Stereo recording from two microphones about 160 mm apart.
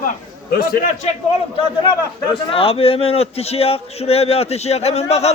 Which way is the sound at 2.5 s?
35° left (ahead or behind).